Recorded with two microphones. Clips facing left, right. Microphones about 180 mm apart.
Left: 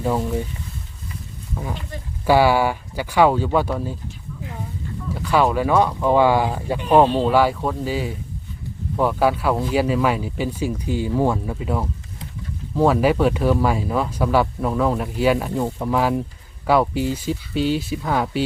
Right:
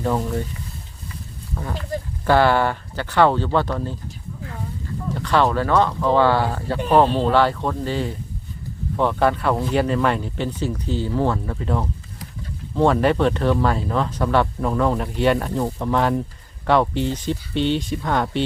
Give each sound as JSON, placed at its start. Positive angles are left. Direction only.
{"t": 0.0, "sound": "speech", "side_deg": 10}
{"t": 1.9, "sound": "speech", "side_deg": -40}
{"t": 2.2, "sound": "speech", "side_deg": 10}
{"t": 5.1, "sound": "speech", "side_deg": 10}